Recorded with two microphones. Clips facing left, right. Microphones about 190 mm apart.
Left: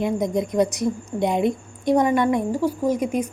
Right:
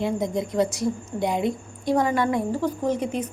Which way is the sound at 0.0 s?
20° left (ahead or behind).